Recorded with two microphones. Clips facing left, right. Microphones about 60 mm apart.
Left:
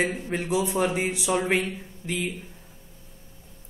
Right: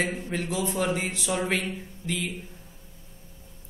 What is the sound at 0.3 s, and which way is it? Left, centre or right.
A man's voice, centre.